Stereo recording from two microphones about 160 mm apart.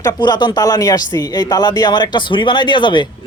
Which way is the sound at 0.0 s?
25° left (ahead or behind).